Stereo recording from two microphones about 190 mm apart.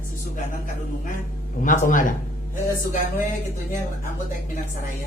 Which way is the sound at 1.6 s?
45° left (ahead or behind).